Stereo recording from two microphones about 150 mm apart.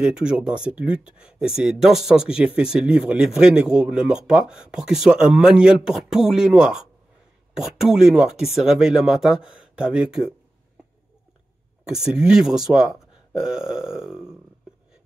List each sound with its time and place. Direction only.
0.0 s speech: 5° right (ahead or behind)
11.9 s speech: 5° right (ahead or behind)